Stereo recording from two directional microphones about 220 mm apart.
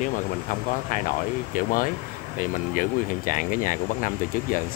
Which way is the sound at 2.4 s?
40° left (ahead or behind).